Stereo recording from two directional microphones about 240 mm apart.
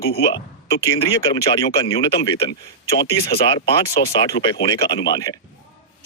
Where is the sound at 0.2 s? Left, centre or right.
Centre.